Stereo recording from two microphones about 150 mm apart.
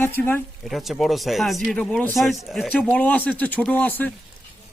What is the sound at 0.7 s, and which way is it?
Speech, centre (ahead or behind).